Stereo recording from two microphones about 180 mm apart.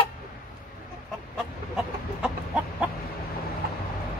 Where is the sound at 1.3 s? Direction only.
5° right (ahead or behind).